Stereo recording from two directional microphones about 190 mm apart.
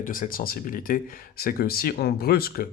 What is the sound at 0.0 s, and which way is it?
Speech, 45° left (ahead or behind).